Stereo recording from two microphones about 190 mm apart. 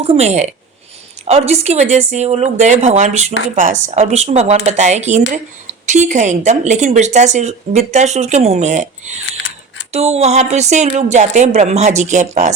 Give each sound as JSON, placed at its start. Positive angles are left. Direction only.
{"t": 0.0, "sound": "a woman's voice", "side_deg": -35}
{"t": 9.9, "sound": "a woman's voice", "side_deg": -35}